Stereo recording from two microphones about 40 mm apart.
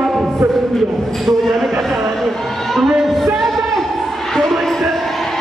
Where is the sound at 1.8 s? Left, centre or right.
Centre.